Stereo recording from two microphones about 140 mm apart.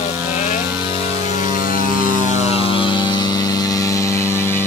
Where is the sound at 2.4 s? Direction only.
45° left (ahead or behind); by 4.6 s 15° left (ahead or behind).